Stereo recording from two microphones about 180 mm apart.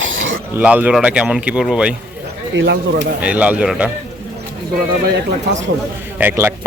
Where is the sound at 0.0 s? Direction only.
90° right.